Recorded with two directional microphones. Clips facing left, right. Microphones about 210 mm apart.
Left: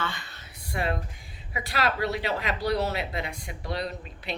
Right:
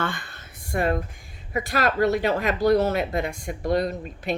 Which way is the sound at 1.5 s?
45° right (ahead or behind).